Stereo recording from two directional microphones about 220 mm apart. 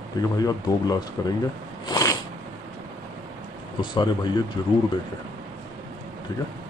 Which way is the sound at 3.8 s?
20° left (ahead or behind).